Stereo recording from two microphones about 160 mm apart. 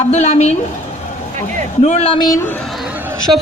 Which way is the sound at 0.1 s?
45° left (ahead or behind).